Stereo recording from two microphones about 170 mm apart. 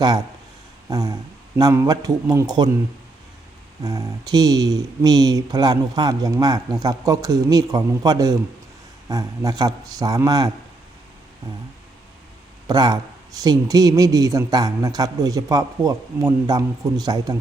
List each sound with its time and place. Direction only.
0.9 s a sound: 20° right (ahead or behind)
1.5 s a man's voice: 20° right (ahead or behind)
3.8 s a man's voice: 20° right (ahead or behind)
12.6 s a man's voice: 25° right (ahead or behind)